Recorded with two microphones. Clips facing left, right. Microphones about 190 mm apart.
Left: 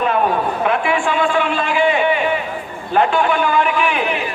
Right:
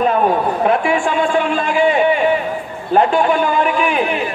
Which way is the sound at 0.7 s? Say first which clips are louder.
Right 2 dB; 45° right (ahead or behind).